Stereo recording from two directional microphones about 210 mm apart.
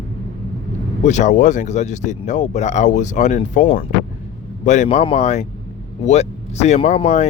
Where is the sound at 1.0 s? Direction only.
35° left (ahead or behind).